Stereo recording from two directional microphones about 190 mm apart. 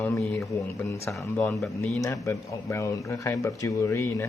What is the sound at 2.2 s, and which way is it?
Speech, 15° left (ahead or behind).